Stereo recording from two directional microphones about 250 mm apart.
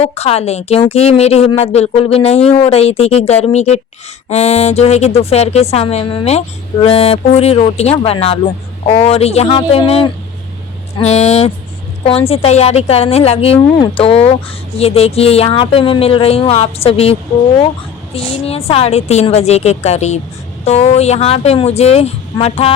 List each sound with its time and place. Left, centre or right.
0.0 s speech: left